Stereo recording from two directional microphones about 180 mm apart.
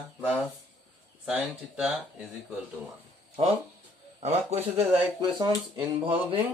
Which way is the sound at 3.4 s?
35° right (ahead or behind).